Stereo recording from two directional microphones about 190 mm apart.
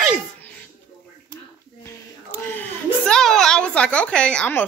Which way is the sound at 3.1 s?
Centre (ahead or behind).